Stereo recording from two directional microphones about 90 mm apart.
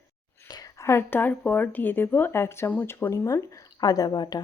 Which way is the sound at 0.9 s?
25° left (ahead or behind).